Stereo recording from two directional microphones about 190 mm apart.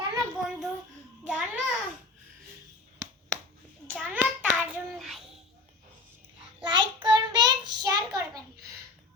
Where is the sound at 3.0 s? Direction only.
15° right (ahead or behind).